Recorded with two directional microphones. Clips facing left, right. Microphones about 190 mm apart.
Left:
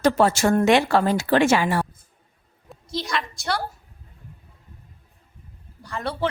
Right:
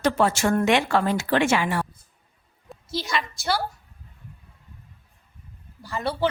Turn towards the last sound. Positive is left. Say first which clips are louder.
# right 1 dB
turn(degrees=-5)  # may be behind; listen again after turning